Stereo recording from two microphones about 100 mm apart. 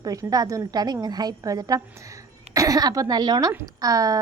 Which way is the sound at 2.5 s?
35° right (ahead or behind).